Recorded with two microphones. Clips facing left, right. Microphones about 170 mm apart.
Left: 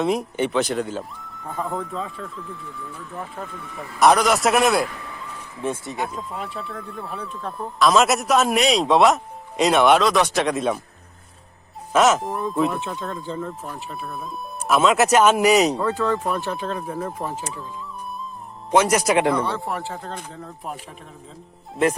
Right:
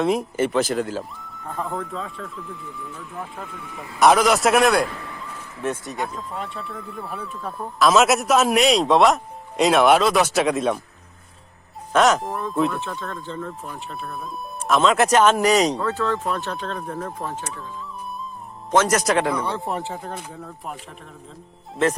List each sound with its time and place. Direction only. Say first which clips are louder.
0.0 s speech: right 1 dB; centre (ahead or behind)
6.0 s speech: even; centre (ahead or behind)
11.9 s speech: even; 5° left (ahead or behind)
18.7 s speech: left 1 dB; 10° left (ahead or behind)
19.4 s speech: left 1 dB; 15° right (ahead or behind)